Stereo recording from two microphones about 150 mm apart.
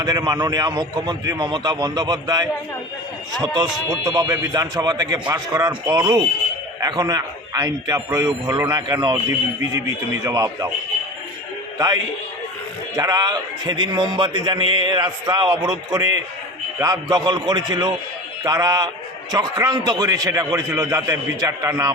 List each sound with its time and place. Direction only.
0.0 s a man's voice: 25° right (ahead or behind)
10.2 s a man's voice: 20° right (ahead or behind)
13.0 s a man's voice: 25° right (ahead or behind)